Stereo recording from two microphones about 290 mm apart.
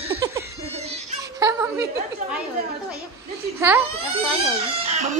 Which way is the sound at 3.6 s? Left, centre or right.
Centre.